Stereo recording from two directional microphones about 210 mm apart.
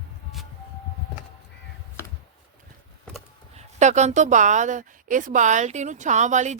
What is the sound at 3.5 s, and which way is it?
A woman's voice, 35° right (ahead or behind).